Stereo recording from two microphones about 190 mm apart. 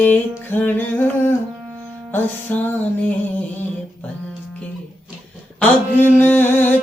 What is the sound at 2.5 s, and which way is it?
Music, 10° left (ahead or behind).